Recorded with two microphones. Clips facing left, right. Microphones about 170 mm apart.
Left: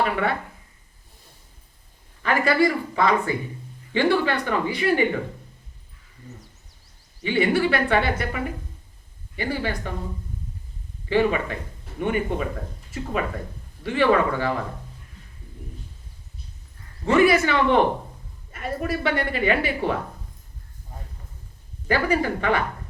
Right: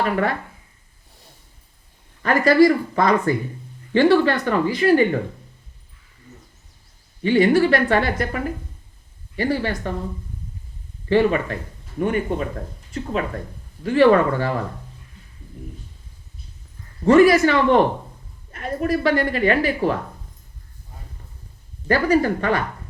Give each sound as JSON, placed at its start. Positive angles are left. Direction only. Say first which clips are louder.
{"t": 0.0, "sound": "speech", "louder": "right 2 dB", "side_deg": -40}
{"t": 2.2, "sound": "a woman's voice", "louder": "right 6 dB", "side_deg": -40}
{"t": 7.3, "sound": "a woman's voice", "louder": "right 5 dB", "side_deg": -40}
{"t": 11.1, "sound": "speech", "louder": "right 3 dB", "side_deg": -40}
{"t": 13.8, "sound": "a woman's voice", "louder": "right 5 dB", "side_deg": -40}
{"t": 17.1, "sound": "a woman's voice", "louder": "right 5 dB", "side_deg": -40}
{"t": 21.8, "sound": "a woman's voice", "louder": "right 4 dB", "side_deg": -45}